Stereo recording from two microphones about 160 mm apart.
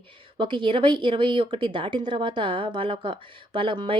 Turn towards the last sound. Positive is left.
turn(degrees=-30)  # may be behind; listen again after turning